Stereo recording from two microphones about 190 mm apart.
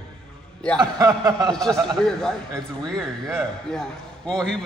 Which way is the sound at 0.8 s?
20° right (ahead or behind).